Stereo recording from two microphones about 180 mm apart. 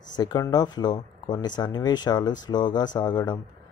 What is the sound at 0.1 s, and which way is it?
Speech, 20° left (ahead or behind).